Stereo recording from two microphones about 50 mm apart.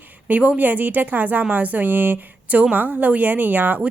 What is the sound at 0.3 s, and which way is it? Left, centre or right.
A woman's voice, right.